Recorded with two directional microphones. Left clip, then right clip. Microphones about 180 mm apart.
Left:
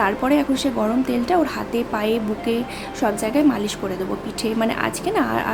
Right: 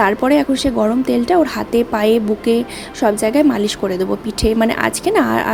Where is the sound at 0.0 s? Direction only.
30° right (ahead or behind).